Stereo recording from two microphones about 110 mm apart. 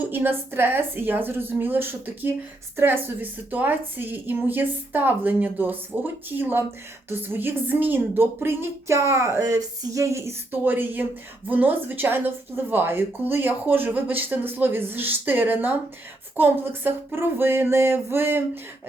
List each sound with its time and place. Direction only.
0.1 s a woman's voice: 20° right (ahead or behind)